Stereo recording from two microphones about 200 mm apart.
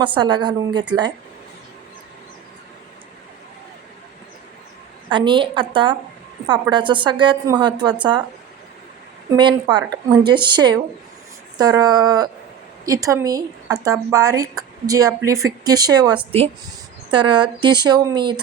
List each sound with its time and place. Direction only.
0.0 s a woman's voice: 25° right (ahead or behind)
5.0 s a woman's voice: 25° right (ahead or behind)
9.3 s a woman's voice: 25° right (ahead or behind)